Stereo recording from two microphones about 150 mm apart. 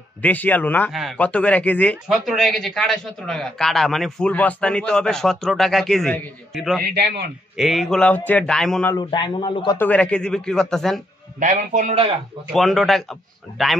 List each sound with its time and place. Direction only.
0.2 s a man's voice: 10° left (ahead or behind)
8.9 s a man's voice: 30° left (ahead or behind)
9.8 s a man's voice: 10° left (ahead or behind)
11.3 s a man's voice: 50° right (ahead or behind)
12.5 s a man's voice: centre (ahead or behind)